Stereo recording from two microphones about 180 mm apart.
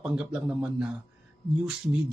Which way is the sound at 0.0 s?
5° right (ahead or behind).